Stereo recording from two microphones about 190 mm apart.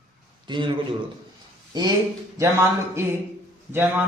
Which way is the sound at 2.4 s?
15° right (ahead or behind).